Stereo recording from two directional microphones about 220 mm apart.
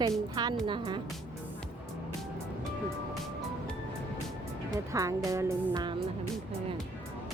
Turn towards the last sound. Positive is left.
turn(degrees=-20)  # may be behind; listen again after turning